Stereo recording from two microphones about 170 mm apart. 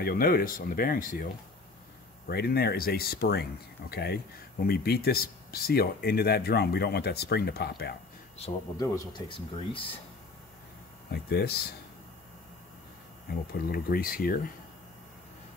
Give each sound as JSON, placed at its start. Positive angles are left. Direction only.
{"t": 0.0, "sound": "speech", "side_deg": 60}
{"t": 2.2, "sound": "speech", "side_deg": 65}
{"t": 8.7, "sound": "speech", "side_deg": 20}
{"t": 11.1, "sound": "speech", "side_deg": 65}
{"t": 13.3, "sound": "speech", "side_deg": 65}